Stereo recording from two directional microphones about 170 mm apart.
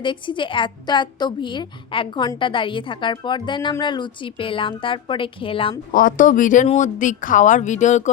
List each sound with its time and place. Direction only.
0.0 s a woman's voice: 30° left (ahead or behind)
5.9 s speech: 55° left (ahead or behind)